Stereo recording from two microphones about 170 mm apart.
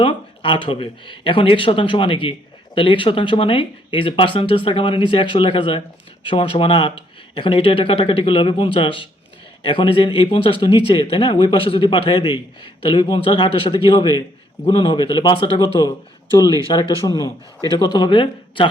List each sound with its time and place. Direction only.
0.0 s speech: 30° left (ahead or behind)